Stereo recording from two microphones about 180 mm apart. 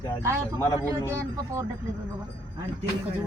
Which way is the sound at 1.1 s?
15° right (ahead or behind).